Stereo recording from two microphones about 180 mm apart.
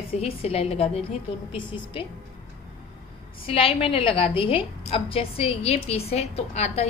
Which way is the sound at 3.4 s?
30° left (ahead or behind).